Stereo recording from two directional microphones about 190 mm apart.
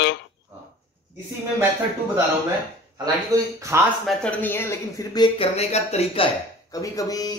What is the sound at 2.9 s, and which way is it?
Speech, 20° right (ahead or behind).